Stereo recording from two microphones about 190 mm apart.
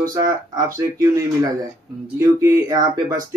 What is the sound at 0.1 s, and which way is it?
Speech, 20° right (ahead or behind).